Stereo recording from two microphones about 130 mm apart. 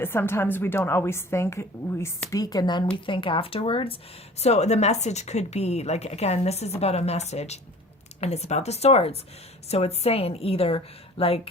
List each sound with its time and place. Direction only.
0.0 s a woman's voice: 15° left (ahead or behind); by 3.9 s 45° left (ahead or behind)
4.4 s a woman's voice: 60° left (ahead or behind)